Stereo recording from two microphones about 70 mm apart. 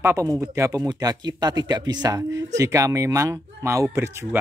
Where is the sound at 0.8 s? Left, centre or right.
Right.